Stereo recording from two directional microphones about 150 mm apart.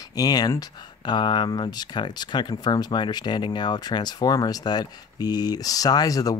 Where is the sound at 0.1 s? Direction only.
25° left (ahead or behind).